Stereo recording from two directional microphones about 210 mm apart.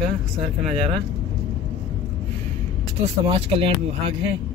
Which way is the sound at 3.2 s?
25° right (ahead or behind).